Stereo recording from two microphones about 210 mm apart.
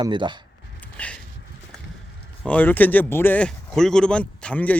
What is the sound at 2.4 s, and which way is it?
Speech, 5° left (ahead or behind).